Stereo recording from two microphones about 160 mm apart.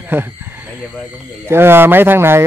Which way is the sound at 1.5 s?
15° right (ahead or behind).